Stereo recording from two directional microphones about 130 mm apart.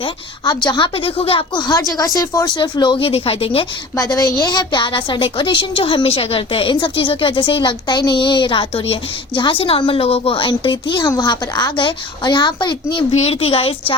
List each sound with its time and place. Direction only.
0.0 s a woman's voice: 35° left (ahead or behind)
3.9 s a woman's voice: 30° left (ahead or behind)
13.1 s a woman's voice: 50° left (ahead or behind)